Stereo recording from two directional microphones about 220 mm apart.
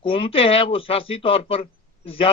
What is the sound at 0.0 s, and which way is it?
A man's voice, 25° left (ahead or behind).